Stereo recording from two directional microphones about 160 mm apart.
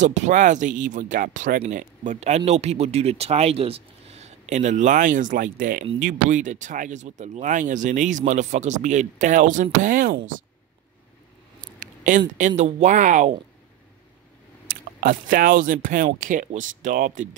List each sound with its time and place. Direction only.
0.0 s speech: 50° right (ahead or behind)
11.8 s a sound: 55° right (ahead or behind)
12.4 s speech: 50° right (ahead or behind)
14.7 s speech: 60° right (ahead or behind)